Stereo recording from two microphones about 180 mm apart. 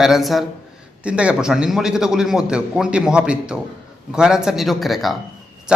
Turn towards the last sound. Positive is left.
turn(degrees=0)  # may be behind; listen again after turning